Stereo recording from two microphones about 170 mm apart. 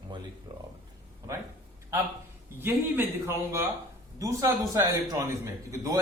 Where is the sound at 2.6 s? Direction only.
15° right (ahead or behind).